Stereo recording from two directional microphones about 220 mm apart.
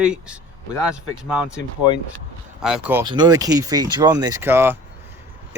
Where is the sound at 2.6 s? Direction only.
5° right (ahead or behind).